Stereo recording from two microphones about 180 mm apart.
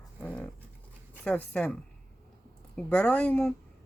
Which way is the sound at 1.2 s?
10° left (ahead or behind).